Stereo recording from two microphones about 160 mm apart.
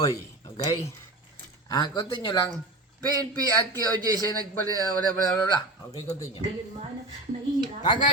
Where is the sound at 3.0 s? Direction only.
25° right (ahead or behind).